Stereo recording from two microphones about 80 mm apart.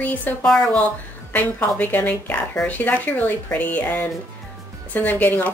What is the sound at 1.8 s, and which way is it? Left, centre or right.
Speech, left.